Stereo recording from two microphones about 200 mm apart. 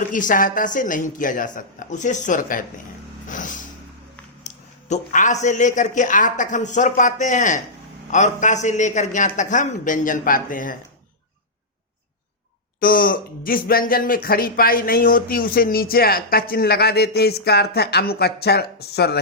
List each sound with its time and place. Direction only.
0.1 s a woman's voice: 40° left (ahead or behind)
3.2 s a sound: 40° left (ahead or behind)
4.4 s a woman's voice: 40° left (ahead or behind)
12.8 s speech: 45° left (ahead or behind)